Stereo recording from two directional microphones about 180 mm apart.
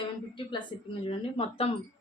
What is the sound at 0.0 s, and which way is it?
A woman's voice, 30° left (ahead or behind).